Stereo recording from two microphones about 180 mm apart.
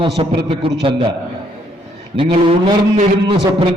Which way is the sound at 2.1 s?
30° right (ahead or behind).